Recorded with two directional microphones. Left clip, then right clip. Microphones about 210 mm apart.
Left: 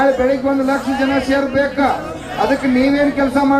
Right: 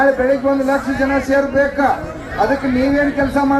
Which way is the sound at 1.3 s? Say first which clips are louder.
Right 1 dB; 25° right (ahead or behind).